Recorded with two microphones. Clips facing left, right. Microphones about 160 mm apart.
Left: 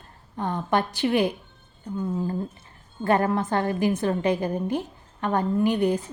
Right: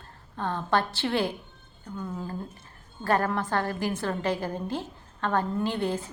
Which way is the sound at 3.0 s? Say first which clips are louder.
Left 4 dB; 20° left (ahead or behind).